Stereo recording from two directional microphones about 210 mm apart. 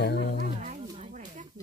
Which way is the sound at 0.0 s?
50° left (ahead or behind).